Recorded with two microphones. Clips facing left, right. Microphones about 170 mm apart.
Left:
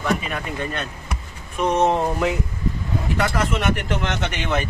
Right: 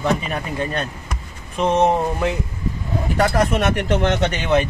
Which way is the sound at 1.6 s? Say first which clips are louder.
Right 2 dB; 20° right (ahead or behind).